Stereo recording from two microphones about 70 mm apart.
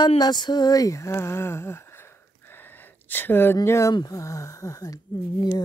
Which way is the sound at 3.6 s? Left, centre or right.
Left.